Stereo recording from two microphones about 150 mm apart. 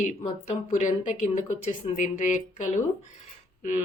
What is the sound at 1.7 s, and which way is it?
A woman's voice, 55° left (ahead or behind).